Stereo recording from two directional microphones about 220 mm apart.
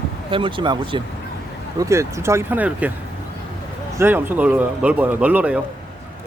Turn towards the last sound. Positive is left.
turn(degrees=-5)  # may be behind; listen again after turning